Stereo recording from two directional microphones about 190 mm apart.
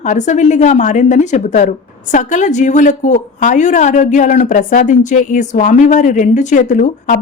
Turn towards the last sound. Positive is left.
turn(degrees=45)  # may be behind; listen again after turning